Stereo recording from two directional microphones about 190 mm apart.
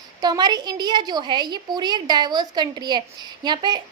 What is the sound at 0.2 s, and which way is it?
A woman's voice, 20° right (ahead or behind).